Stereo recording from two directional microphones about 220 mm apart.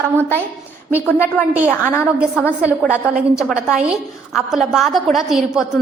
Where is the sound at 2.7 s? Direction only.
5° right (ahead or behind).